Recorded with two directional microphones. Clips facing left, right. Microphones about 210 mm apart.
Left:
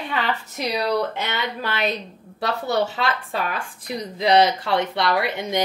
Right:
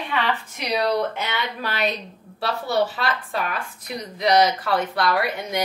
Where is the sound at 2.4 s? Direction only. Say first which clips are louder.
Even; 20° left (ahead or behind).